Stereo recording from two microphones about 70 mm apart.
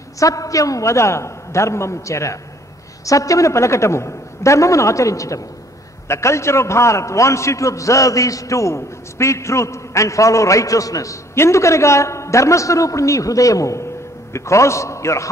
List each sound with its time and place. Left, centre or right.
0.2 s a man's voice: left
11.3 s a man's voice: left